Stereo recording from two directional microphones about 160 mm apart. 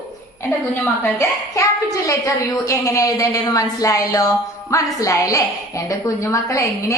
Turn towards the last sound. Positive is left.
turn(degrees=20)  # may be behind; listen again after turning